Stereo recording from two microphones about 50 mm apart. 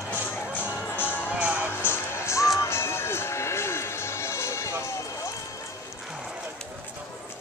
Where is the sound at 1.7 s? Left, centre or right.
Left.